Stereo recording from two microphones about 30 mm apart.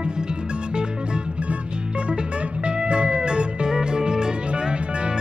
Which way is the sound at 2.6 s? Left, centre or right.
Right.